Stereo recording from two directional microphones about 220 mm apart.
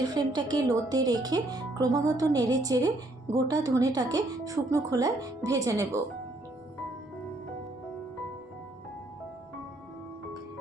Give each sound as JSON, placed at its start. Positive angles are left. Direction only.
{"t": 0.2, "sound": "speech", "side_deg": -20}